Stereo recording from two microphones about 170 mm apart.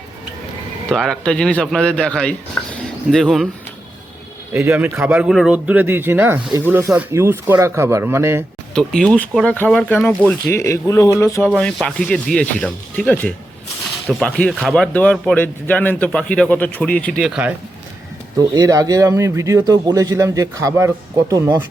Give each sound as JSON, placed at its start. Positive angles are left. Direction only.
{"t": 0.9, "sound": "speech", "side_deg": 0}
{"t": 2.6, "sound": "speech", "side_deg": 15}
{"t": 3.1, "sound": "speech", "side_deg": 0}
{"t": 4.5, "sound": "speech", "side_deg": -10}
{"t": 8.7, "sound": "speech", "side_deg": 5}
{"t": 11.4, "sound": "speech", "side_deg": 5}
{"t": 18.3, "sound": "speech", "side_deg": -20}